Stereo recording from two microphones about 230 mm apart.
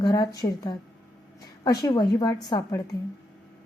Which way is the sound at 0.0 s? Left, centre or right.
Centre.